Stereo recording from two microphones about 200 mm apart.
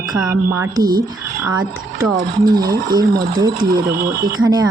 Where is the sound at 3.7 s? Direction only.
50° right (ahead or behind).